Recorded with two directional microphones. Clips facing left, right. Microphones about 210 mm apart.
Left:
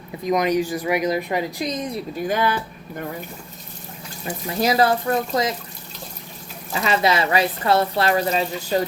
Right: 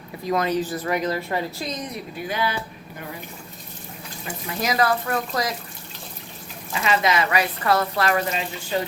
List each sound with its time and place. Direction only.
0.3 s a woman's voice: 15° left (ahead or behind)
2.2 s speech: 45° left (ahead or behind)
4.3 s speech: 30° left (ahead or behind)
6.7 s speech: 35° left (ahead or behind)